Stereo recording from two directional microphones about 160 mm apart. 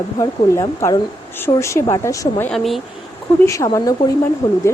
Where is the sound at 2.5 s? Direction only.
Centre (ahead or behind).